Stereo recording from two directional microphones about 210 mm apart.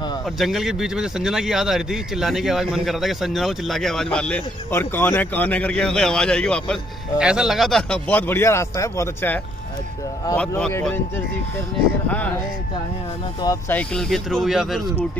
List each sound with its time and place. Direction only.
0.4 s speech: centre (ahead or behind)
13.4 s speech: 10° left (ahead or behind)